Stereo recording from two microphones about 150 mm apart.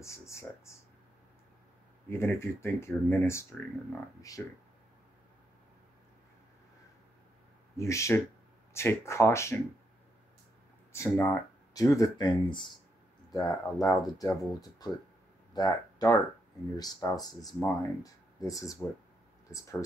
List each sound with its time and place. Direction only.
0.0 s speech: 20° left (ahead or behind)
2.0 s speech: 15° left (ahead or behind)
7.7 s speech: 20° left (ahead or behind)
10.9 s speech: 15° left (ahead or behind)